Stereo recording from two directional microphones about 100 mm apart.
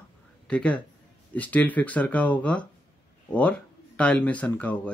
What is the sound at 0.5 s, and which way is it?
Speech, 10° left (ahead or behind).